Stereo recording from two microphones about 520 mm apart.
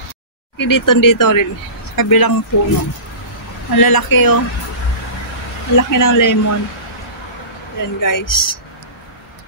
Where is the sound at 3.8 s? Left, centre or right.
Left.